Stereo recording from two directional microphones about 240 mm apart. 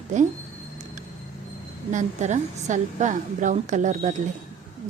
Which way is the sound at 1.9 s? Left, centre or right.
Right.